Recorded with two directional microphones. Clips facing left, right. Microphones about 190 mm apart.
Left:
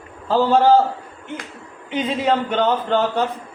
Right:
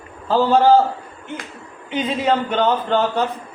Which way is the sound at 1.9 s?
60° left (ahead or behind).